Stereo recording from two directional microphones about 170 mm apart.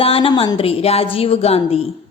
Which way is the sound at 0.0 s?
30° left (ahead or behind).